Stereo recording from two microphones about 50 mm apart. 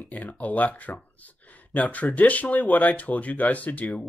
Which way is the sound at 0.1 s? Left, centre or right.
Left.